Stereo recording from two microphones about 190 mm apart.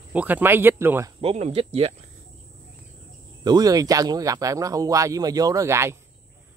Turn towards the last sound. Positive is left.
turn(degrees=-15)  # may be behind; listen again after turning